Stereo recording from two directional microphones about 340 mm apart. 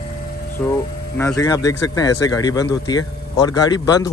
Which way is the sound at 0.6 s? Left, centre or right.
Centre.